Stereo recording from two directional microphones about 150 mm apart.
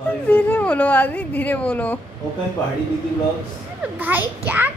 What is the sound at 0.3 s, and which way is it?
Speech, 10° left (ahead or behind).